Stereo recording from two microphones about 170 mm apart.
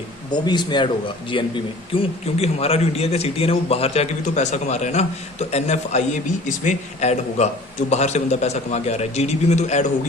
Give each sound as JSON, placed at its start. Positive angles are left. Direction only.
{"t": 0.3, "sound": "a man's voice", "side_deg": 25}